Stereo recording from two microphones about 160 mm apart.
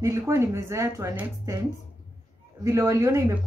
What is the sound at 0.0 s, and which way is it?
A woman's voice, 20° right (ahead or behind).